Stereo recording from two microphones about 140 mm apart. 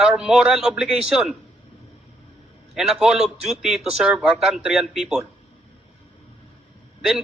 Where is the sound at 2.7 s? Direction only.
5° right (ahead or behind).